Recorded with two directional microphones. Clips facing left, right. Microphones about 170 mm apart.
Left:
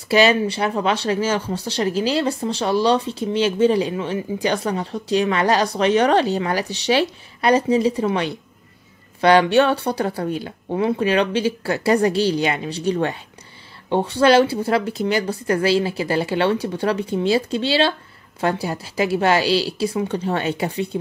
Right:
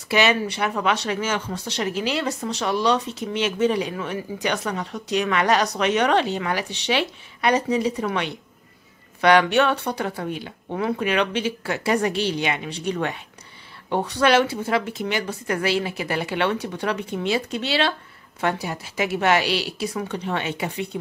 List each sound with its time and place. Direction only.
0.1 s speech: 35° left (ahead or behind)